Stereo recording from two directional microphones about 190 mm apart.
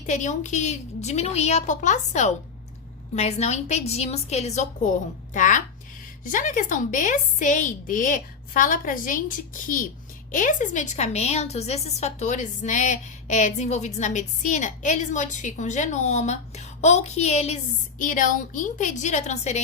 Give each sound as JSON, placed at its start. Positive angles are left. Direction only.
{"t": 0.0, "sound": "a woman's voice", "side_deg": 40}